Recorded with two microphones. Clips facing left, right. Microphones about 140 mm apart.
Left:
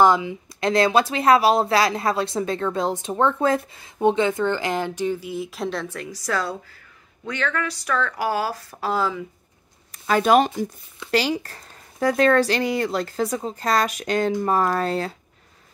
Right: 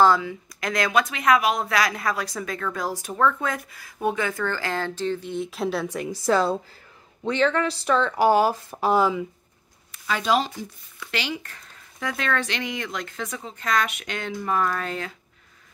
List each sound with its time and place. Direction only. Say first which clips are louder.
0.0 s speech: left 1 dB; 20° left (ahead or behind); by 5.9 s 5° right (ahead or behind)
5.9 s speech: right 5 dB; 20° right (ahead or behind)
10.0 s speech: left 6 dB; 50° left (ahead or behind)
11.1 s speech: left 8 dB; 40° left (ahead or behind)